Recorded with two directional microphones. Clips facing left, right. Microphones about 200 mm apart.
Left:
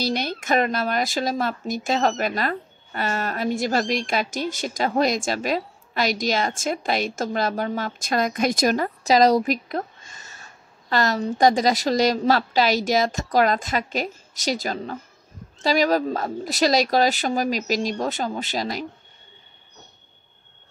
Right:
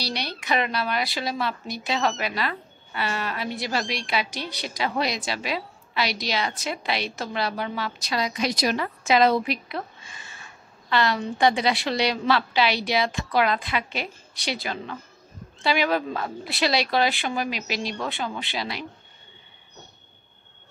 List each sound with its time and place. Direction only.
0.0 s speech: 45° left (ahead or behind)